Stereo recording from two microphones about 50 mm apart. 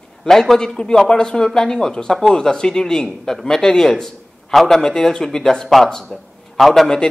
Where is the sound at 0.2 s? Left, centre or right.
Centre.